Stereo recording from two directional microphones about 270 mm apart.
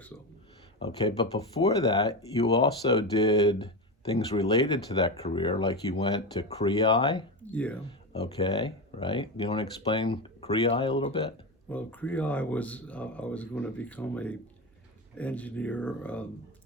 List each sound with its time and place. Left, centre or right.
0.8 s speech: centre
7.5 s speech: centre
11.7 s speech: centre